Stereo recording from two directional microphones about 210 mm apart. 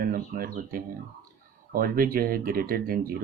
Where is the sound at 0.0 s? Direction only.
45° right (ahead or behind).